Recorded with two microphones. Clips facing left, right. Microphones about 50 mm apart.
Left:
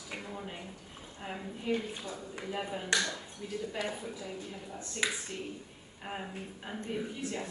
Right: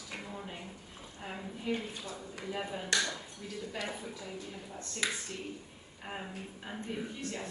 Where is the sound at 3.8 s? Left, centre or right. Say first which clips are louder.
Left 2 dB; centre.